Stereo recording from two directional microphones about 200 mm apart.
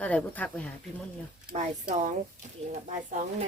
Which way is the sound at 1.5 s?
35° right (ahead or behind).